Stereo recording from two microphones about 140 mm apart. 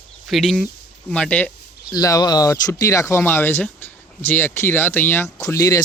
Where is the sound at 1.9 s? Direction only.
25° left (ahead or behind).